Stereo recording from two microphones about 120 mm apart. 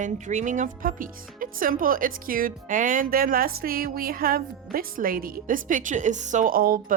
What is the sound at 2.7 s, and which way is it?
Speech, 90° right.